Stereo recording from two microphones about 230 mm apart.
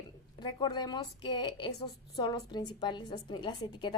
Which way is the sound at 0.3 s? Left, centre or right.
Centre.